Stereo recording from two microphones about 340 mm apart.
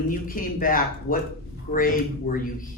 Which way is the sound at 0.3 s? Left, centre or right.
Left.